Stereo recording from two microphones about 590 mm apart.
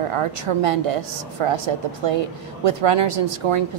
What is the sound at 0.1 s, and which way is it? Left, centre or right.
A woman's voice, right.